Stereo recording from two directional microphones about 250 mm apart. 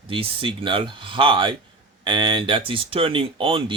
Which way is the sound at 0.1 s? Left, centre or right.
Right.